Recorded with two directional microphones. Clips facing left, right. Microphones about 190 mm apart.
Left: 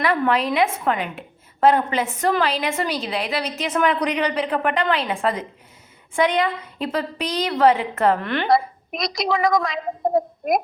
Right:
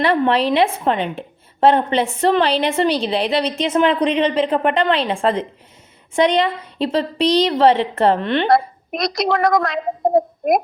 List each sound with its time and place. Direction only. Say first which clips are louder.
0.0 s a woman's voice: right 4 dB; 30° right (ahead or behind)
8.4 s a woman's voice: right 3 dB; centre (ahead or behind)